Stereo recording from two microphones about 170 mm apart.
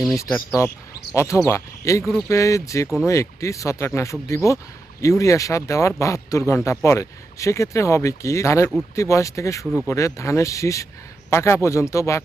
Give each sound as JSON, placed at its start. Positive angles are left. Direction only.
{"t": 0.2, "sound": "speech", "side_deg": 15}